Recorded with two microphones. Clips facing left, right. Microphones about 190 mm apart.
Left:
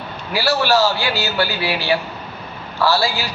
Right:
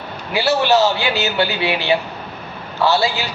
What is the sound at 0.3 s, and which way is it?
Speech, 20° right (ahead or behind).